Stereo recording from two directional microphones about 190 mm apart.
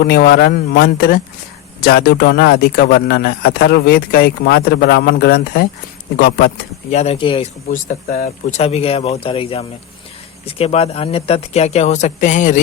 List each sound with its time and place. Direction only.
0.0 s a man's voice: 55° left (ahead or behind)
6.9 s speech: 35° left (ahead or behind)
7.7 s speech: 45° left (ahead or behind)